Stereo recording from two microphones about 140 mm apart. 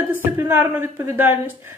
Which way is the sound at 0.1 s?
15° right (ahead or behind).